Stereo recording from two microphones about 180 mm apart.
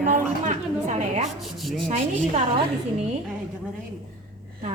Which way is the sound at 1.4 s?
Centre (ahead or behind).